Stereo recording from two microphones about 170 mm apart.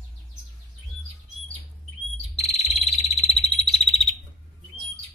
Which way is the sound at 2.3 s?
35° left (ahead or behind).